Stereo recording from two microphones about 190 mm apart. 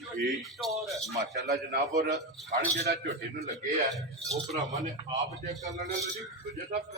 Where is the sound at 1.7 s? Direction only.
40° right (ahead or behind).